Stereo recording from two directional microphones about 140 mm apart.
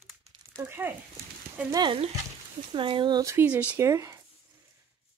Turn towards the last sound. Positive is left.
turn(degrees=-20)  # may be behind; listen again after turning